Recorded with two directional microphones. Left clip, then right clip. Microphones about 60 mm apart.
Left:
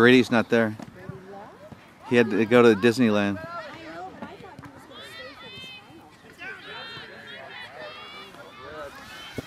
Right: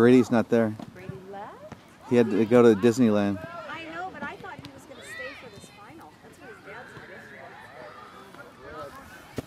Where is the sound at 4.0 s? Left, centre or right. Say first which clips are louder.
Right 4 dB; left.